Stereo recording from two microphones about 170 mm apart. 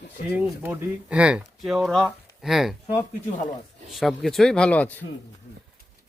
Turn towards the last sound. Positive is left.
turn(degrees=10)  # may be behind; listen again after turning